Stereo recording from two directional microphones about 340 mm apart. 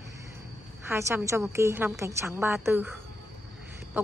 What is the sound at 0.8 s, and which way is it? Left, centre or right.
A woman's voice, centre.